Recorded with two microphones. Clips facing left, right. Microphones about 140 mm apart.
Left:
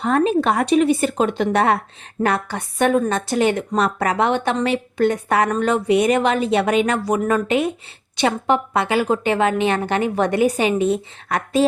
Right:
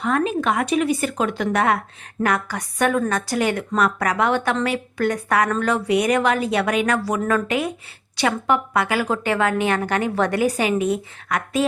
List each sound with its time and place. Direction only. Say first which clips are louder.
0.0 s a woman's voice: left 4 dB; 35° left (ahead or behind)